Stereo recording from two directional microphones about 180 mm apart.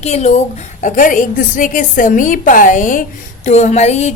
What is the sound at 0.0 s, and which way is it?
A woman's voice, 40° left (ahead or behind).